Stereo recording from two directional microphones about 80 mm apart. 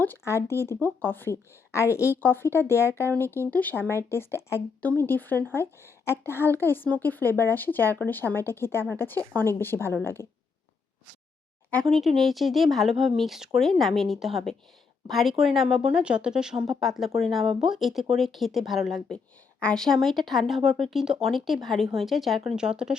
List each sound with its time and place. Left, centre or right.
0.3 s a woman's voice: left
4.8 s a woman's voice: left
9.1 s speech: right
9.5 s a woman's voice: left
11.9 s speech: centre
19.1 s speech: centre